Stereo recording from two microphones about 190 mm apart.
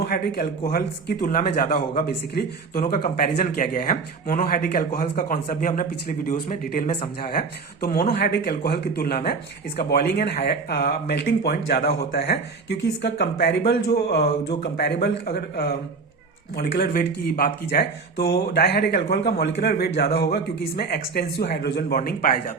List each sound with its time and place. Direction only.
0.0 s speech: 50° left (ahead or behind)